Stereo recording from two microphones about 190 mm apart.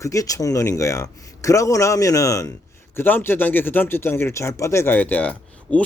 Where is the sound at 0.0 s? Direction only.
15° left (ahead or behind).